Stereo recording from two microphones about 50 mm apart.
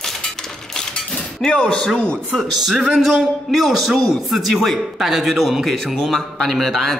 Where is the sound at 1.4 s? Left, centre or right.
Centre.